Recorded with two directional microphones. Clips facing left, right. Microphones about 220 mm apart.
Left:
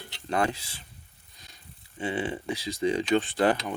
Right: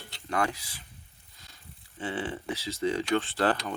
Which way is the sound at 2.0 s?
15° left (ahead or behind).